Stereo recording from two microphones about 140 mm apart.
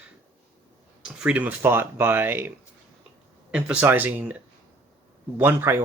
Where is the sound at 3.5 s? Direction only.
10° right (ahead or behind).